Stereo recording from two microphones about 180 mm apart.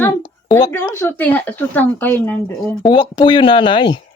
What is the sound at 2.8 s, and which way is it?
Speech, 25° left (ahead or behind).